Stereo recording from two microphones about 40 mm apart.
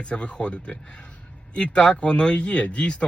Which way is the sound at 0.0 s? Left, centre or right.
Left.